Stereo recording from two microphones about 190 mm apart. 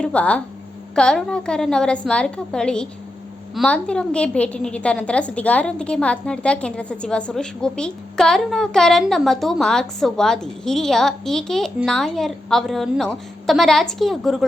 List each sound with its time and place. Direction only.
0.0 s a woman's voice: 5° left (ahead or behind)